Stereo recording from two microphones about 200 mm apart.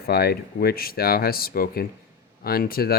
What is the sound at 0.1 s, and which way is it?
Speech, 50° left (ahead or behind).